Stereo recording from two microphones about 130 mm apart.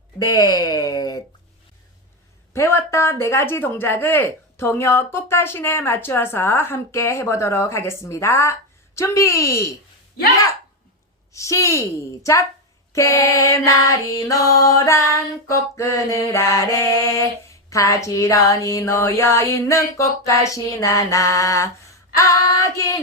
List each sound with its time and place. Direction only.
0.3 s a sound: 30° left (ahead or behind)
2.5 s speech: 20° left (ahead or behind)
11.3 s speech: 25° left (ahead or behind)